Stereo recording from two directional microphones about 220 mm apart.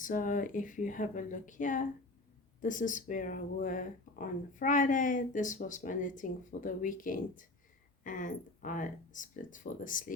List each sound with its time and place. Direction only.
0.0 s speech: 35° left (ahead or behind)